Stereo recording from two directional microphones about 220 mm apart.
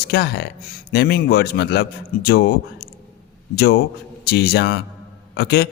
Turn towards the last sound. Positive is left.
turn(degrees=45)  # may be behind; listen again after turning